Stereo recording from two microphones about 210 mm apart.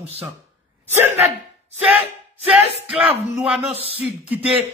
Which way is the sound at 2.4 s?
5° right (ahead or behind).